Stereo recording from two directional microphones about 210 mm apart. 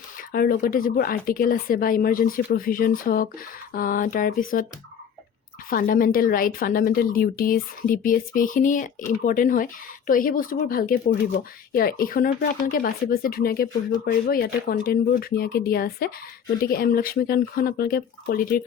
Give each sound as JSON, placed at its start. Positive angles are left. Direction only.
{"t": 0.3, "sound": "a woman's voice", "side_deg": 45}
{"t": 5.7, "sound": "a woman's voice", "side_deg": 40}